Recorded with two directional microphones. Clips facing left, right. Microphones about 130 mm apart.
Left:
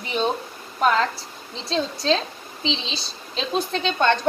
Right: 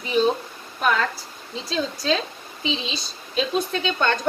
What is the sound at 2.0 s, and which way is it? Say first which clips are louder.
A woman's voice: left 1 dB; 30° left (ahead or behind).